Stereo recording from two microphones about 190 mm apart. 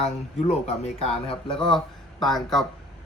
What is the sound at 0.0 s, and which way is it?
Speech, 35° left (ahead or behind).